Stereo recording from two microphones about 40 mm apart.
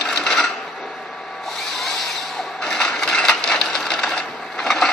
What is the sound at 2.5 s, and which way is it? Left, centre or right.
Sewing machine, centre.